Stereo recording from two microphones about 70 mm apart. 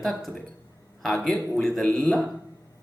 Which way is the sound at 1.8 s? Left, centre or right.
Centre.